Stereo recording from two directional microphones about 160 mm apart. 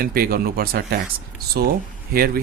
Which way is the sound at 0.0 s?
65° right (ahead or behind).